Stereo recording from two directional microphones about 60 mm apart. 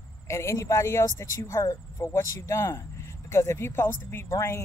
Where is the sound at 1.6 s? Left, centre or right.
Left.